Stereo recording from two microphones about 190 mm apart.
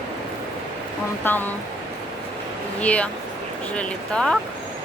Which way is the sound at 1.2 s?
10° left (ahead or behind).